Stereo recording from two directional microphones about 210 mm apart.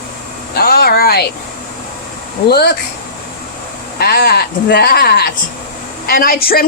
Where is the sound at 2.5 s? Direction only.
50° left (ahead or behind).